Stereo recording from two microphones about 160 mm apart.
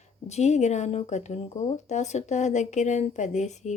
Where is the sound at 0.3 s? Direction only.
45° left (ahead or behind).